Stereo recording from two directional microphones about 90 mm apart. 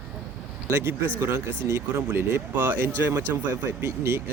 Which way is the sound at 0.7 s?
30° right (ahead or behind).